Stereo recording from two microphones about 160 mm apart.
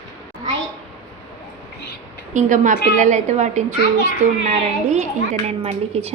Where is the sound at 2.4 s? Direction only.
50° right (ahead or behind).